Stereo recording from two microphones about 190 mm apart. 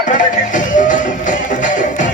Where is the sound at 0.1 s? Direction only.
40° left (ahead or behind).